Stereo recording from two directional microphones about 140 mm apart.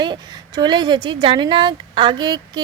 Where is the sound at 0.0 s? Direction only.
30° right (ahead or behind).